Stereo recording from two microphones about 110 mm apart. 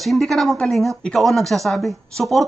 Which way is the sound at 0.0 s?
Centre (ahead or behind).